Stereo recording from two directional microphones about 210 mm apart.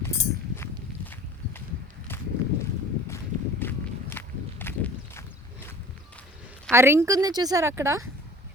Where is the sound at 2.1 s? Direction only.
10° left (ahead or behind).